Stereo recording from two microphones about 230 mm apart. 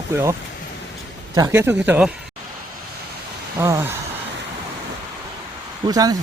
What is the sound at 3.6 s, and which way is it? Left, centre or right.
Speech, centre.